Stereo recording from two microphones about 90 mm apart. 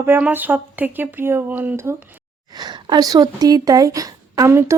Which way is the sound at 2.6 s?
55° right (ahead or behind).